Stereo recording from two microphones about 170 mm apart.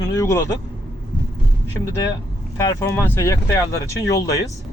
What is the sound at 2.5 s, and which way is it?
Speech, 20° left (ahead or behind).